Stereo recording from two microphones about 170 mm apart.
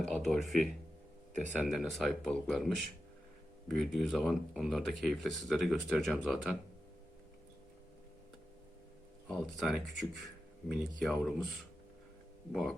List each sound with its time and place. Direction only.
0.0 s speech: centre (ahead or behind)
9.3 s speech: centre (ahead or behind)
12.5 s speech: centre (ahead or behind)